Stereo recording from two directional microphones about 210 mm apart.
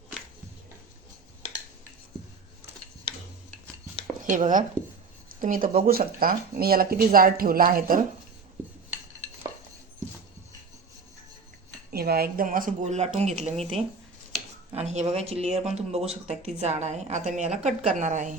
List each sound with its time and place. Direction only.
4.3 s speech: 40° right (ahead or behind)
11.9 s speech: 45° right (ahead or behind)